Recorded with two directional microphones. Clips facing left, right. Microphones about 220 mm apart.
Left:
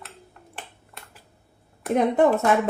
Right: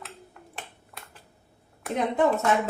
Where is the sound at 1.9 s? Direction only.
55° left (ahead or behind).